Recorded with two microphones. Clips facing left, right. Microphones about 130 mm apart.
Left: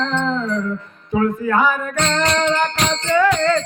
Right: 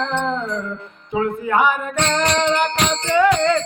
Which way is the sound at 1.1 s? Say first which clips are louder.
Left 1 dB; 20° right (ahead or behind).